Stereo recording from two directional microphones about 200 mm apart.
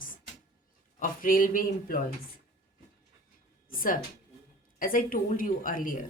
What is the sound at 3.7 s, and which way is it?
A woman's voice, 45° left (ahead or behind).